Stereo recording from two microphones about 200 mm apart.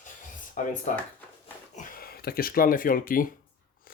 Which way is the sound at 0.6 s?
40° left (ahead or behind).